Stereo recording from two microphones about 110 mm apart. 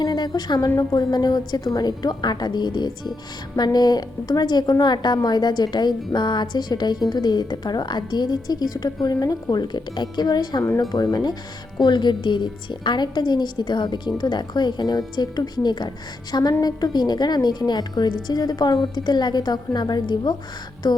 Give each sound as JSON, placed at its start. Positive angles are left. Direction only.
{"t": 0.0, "sound": "a woman's voice", "side_deg": 40}